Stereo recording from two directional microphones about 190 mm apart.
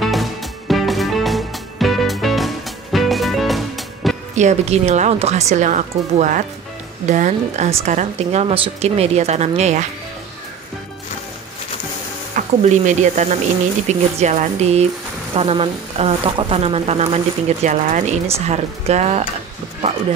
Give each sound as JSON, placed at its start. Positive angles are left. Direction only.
{"t": 0.0, "sound": "music", "side_deg": 0}
{"t": 4.4, "sound": "speech", "side_deg": -35}
{"t": 12.4, "sound": "speech", "side_deg": -40}